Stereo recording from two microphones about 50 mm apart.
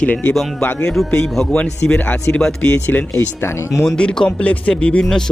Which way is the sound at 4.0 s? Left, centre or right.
Centre.